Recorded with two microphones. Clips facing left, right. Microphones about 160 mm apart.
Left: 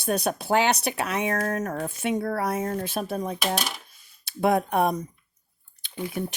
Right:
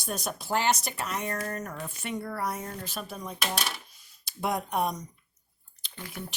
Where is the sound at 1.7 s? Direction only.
55° left (ahead or behind).